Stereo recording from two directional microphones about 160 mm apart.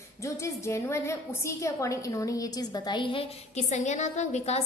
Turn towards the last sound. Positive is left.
turn(degrees=45)  # may be behind; listen again after turning